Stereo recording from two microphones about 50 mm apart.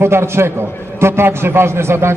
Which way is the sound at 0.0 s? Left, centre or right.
Right.